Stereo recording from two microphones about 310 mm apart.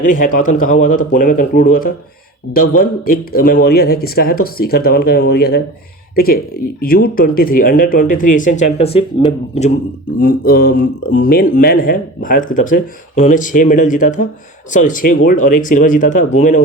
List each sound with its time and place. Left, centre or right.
0.0 s speech: left